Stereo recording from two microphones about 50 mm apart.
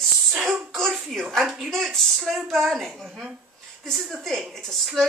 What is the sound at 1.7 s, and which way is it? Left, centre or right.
Speech, centre.